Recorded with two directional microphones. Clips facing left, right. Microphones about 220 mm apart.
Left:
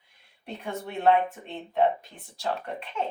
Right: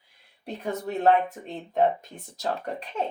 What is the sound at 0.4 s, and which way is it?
Speech, 40° right (ahead or behind).